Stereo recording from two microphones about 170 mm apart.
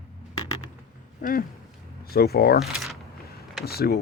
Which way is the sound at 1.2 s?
55° left (ahead or behind).